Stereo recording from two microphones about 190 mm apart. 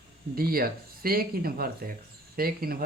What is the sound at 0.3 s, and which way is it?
Speech, 50° right (ahead or behind).